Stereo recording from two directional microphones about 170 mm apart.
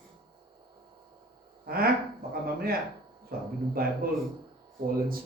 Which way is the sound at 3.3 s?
60° right (ahead or behind).